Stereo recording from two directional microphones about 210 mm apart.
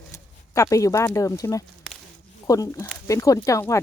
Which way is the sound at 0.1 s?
15° left (ahead or behind).